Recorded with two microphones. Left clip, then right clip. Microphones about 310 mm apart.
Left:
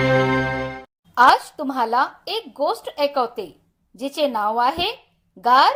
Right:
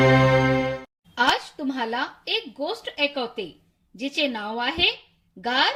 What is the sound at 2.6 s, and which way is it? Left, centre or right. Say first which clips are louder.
Speech: left 5 dB; left.